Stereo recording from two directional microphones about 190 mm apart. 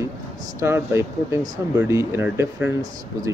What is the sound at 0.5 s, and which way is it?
Speech, 15° right (ahead or behind).